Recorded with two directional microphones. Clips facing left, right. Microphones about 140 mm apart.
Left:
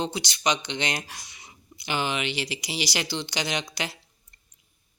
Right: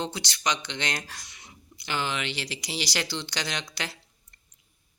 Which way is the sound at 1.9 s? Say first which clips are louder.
Left 3 dB; 15° left (ahead or behind).